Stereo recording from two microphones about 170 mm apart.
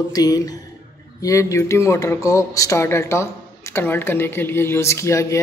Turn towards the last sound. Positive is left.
turn(degrees=15)  # may be behind; listen again after turning